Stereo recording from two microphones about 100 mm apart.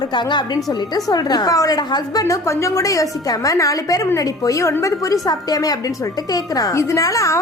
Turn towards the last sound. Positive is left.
turn(degrees=35)  # may be behind; listen again after turning